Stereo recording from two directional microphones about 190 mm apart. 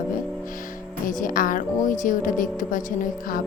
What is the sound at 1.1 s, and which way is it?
Speech, 45° left (ahead or behind).